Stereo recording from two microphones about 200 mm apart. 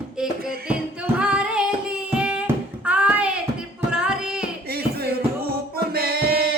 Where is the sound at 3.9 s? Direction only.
5° right (ahead or behind).